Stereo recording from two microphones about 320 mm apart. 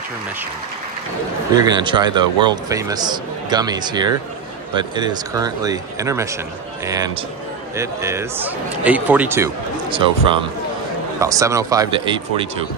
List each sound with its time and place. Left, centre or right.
1.6 s a man's voice: centre
7.7 s a man's voice: centre